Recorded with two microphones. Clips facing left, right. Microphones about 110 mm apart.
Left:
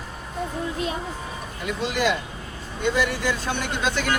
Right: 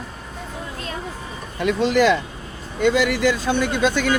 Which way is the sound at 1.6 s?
90° right.